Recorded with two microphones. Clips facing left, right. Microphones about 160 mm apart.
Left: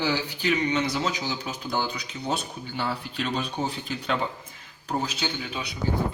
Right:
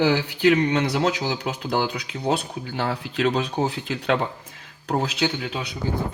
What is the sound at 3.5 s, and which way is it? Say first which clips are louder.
Speech: right 5 dB; 80° right.